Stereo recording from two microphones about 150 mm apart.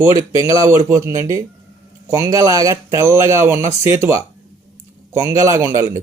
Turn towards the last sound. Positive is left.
turn(degrees=-20)  # may be behind; listen again after turning